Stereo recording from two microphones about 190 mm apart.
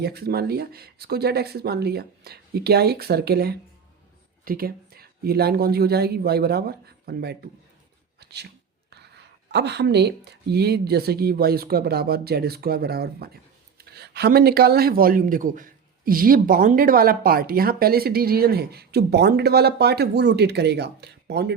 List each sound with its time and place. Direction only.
0.0 s speech: 55° right (ahead or behind)
8.2 s a sound: 60° right (ahead or behind)
8.9 s speech: 60° right (ahead or behind)